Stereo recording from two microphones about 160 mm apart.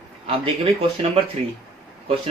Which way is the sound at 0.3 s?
35° right (ahead or behind).